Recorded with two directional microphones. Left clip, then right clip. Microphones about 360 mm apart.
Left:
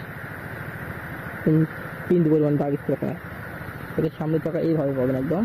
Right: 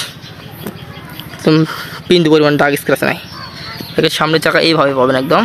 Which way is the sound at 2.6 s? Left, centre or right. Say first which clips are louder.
Right 13 dB; centre.